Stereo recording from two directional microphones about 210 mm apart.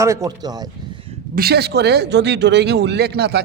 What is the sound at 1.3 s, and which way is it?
Speech, 50° right (ahead or behind).